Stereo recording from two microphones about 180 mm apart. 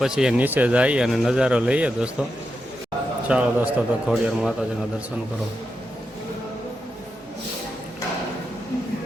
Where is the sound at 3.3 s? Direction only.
5° right (ahead or behind).